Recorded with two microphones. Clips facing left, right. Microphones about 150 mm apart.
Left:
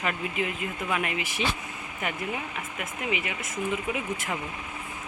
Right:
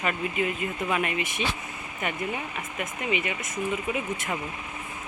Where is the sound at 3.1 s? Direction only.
10° left (ahead or behind).